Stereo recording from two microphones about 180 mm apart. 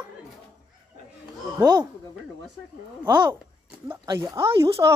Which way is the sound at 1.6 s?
25° right (ahead or behind).